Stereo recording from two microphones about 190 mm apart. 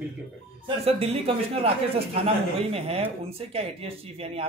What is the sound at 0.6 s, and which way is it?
Speech, 30° right (ahead or behind).